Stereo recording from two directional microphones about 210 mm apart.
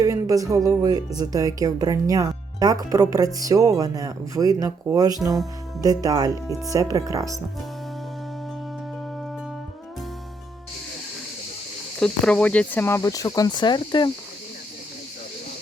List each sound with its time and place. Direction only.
0.0 s speech: 15° right (ahead or behind)
11.9 s speech: 5° left (ahead or behind); by 14.1 s 20° left (ahead or behind)